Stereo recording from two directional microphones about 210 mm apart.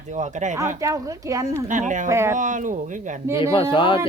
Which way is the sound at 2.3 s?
35° right (ahead or behind).